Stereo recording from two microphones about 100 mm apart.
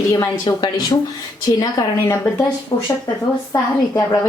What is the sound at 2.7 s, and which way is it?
Speech, 35° left (ahead or behind).